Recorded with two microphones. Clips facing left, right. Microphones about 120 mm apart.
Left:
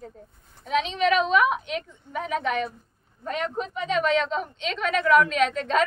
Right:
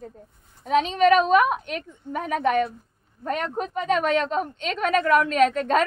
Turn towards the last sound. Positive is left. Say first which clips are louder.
# right 3 dB
turn(degrees=-50)  # may be behind; listen again after turning